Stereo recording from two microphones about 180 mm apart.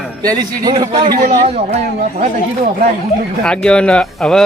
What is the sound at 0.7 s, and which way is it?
Speech, 25° right (ahead or behind).